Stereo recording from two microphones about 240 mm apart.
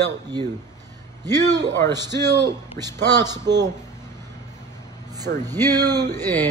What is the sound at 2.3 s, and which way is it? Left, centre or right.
Speech, centre.